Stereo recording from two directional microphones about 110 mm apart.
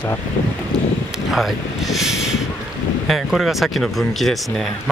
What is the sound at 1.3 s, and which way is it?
Speech, centre (ahead or behind).